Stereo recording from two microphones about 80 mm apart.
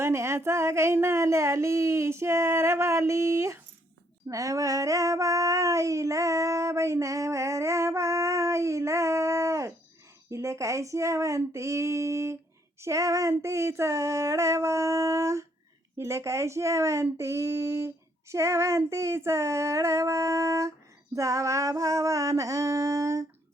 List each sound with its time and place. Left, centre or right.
0.0 s speech: right
4.3 s a sound: right
10.3 s speech: right